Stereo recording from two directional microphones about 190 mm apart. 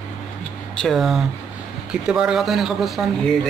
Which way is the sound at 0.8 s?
Centre (ahead or behind).